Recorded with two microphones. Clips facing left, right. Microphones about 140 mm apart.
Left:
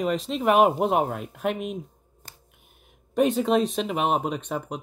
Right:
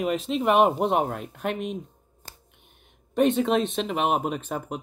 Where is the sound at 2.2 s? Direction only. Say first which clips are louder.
Right 2 dB; 35° right (ahead or behind).